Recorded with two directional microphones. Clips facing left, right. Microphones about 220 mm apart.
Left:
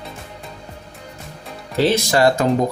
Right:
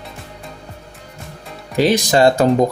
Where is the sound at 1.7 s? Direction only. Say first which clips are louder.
Right 2 dB; 15° right (ahead or behind).